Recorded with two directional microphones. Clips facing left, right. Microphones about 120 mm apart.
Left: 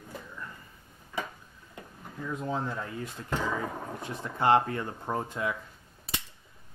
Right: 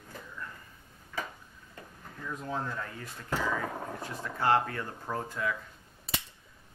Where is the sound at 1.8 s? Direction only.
15° left (ahead or behind).